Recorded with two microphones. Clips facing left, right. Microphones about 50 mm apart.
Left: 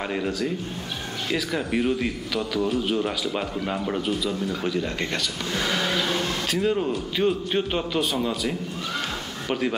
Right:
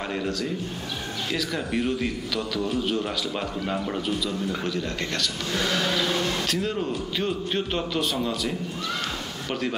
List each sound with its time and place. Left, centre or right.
0.1 s a man's voice: centre